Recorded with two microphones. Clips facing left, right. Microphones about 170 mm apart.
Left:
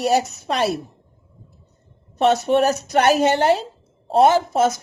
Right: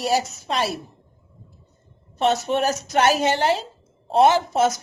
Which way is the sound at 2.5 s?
55° left (ahead or behind).